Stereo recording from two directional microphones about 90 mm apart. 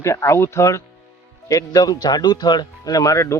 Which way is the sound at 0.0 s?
35° left (ahead or behind).